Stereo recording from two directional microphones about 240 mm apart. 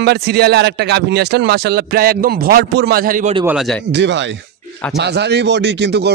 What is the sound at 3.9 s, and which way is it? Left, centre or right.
Speech, right.